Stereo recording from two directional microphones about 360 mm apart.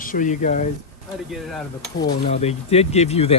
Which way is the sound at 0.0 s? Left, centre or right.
Left.